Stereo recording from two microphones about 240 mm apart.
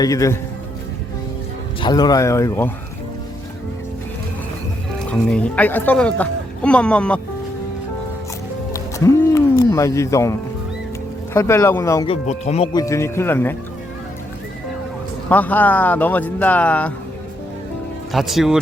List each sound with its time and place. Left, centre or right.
0.0 s speech: centre
1.8 s speech: centre
5.0 s speech: centre
8.7 s music: centre
11.3 s speech: centre
12.1 s speech: left
12.8 s speech: centre
15.3 s speech: centre
18.1 s speech: centre